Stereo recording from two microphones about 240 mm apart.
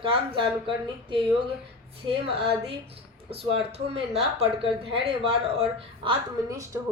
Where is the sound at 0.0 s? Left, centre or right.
Right.